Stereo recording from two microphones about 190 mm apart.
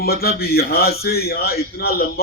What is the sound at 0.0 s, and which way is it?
A man's voice, 55° left (ahead or behind).